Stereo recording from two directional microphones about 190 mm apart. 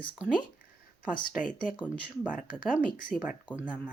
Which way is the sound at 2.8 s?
5° left (ahead or behind).